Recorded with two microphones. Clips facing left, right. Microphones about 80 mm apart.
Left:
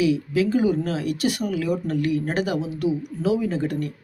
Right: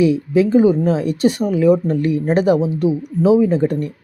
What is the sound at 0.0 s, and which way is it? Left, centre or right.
Speech, right.